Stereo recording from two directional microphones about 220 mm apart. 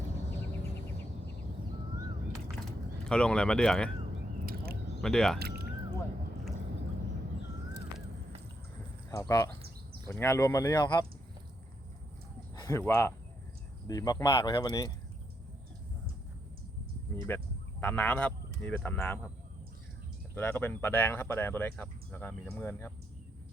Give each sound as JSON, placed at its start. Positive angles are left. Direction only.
{"t": 3.1, "sound": "speech", "side_deg": 5}
{"t": 4.4, "sound": "a sound", "side_deg": -45}
{"t": 4.9, "sound": "speech", "side_deg": 5}
{"t": 5.4, "sound": "a sound", "side_deg": -45}
{"t": 9.0, "sound": "speech", "side_deg": 15}
{"t": 12.5, "sound": "speech", "side_deg": 15}
{"t": 17.2, "sound": "speech", "side_deg": 5}
{"t": 20.3, "sound": "speech", "side_deg": 10}